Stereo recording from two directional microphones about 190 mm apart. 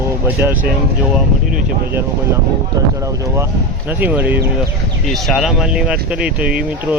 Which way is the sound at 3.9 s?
10° right (ahead or behind).